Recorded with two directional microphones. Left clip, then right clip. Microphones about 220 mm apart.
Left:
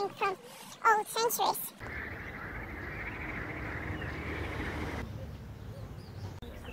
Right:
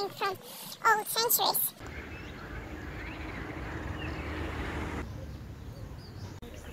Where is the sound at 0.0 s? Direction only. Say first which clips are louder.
Even; 5° left (ahead or behind).